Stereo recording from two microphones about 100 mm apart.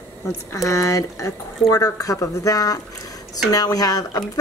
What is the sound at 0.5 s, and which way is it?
Speech, 30° left (ahead or behind).